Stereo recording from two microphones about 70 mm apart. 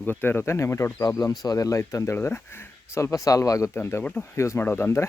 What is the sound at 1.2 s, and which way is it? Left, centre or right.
Speech, left.